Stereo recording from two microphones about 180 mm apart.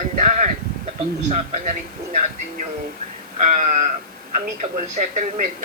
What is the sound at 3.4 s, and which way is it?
A man's voice, 45° right (ahead or behind).